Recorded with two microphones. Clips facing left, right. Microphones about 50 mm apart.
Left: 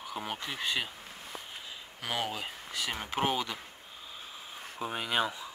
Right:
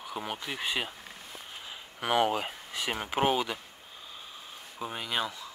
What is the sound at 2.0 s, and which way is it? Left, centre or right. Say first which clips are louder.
Speech: right 8 dB; right.